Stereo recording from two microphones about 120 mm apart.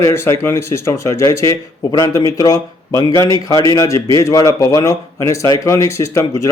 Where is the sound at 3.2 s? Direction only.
40° right (ahead or behind).